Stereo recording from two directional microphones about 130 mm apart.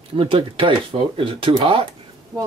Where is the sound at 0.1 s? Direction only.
40° right (ahead or behind).